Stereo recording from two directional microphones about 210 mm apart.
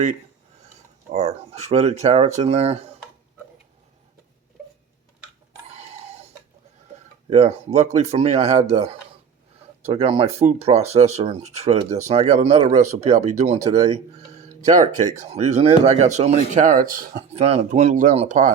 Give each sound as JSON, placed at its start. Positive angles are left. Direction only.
{"t": 1.1, "sound": "speech", "side_deg": -30}
{"t": 5.7, "sound": "a sound", "side_deg": -30}
{"t": 7.3, "sound": "speech", "side_deg": -30}
{"t": 17.3, "sound": "speech", "side_deg": -30}